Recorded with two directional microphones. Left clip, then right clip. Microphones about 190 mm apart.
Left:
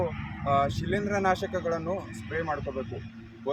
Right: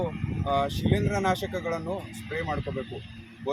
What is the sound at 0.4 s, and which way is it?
Speech, centre (ahead or behind).